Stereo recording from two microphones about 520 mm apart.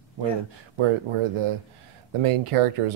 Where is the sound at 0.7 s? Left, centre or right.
Right.